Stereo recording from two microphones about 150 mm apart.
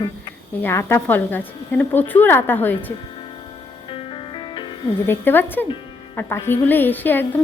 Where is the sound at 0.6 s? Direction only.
15° left (ahead or behind).